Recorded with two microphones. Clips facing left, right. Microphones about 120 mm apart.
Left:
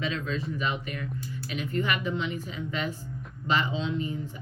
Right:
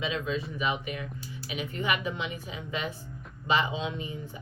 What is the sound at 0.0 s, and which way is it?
Speech, 10° right (ahead or behind).